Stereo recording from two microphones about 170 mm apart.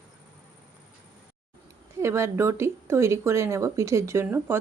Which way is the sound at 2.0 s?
15° right (ahead or behind).